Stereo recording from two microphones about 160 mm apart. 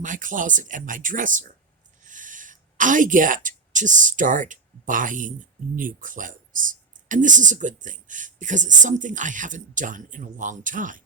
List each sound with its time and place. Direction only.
0.0 s a woman's voice: 55° right (ahead or behind)